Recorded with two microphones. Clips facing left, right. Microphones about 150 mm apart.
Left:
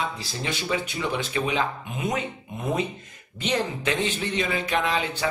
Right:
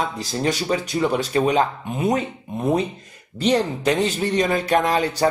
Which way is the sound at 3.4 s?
35° right (ahead or behind).